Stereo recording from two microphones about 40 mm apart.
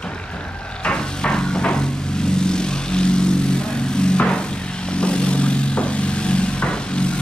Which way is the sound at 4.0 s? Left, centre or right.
Left.